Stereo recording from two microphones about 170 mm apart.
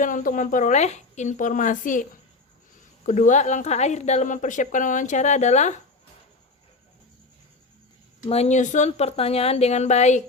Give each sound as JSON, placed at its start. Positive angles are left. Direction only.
{"t": 0.0, "sound": "a woman's voice", "side_deg": 50}
{"t": 3.1, "sound": "a woman's voice", "side_deg": 45}
{"t": 8.3, "sound": "a woman's voice", "side_deg": 40}